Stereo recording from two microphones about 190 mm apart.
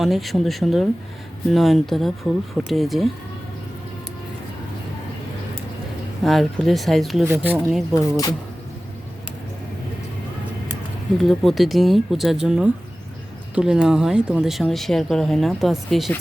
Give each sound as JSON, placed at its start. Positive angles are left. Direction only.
{"t": 0.0, "sound": "speech", "side_deg": 0}
{"t": 6.2, "sound": "speech", "side_deg": 0}
{"t": 8.1, "sound": "speech", "side_deg": 20}
{"t": 11.2, "sound": "speech", "side_deg": 0}